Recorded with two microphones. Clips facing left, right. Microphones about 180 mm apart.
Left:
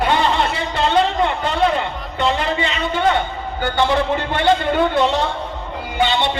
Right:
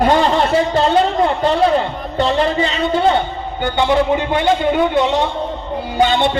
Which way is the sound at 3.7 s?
10° right (ahead or behind).